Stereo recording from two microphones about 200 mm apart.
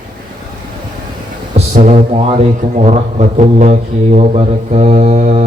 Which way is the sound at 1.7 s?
35° right (ahead or behind).